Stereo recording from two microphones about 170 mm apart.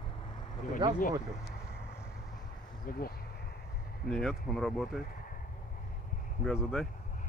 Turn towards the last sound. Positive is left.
turn(degrees=0)  # may be behind; listen again after turning